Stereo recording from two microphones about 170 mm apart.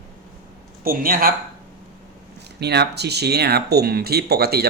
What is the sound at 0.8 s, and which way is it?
Speech, 60° right (ahead or behind).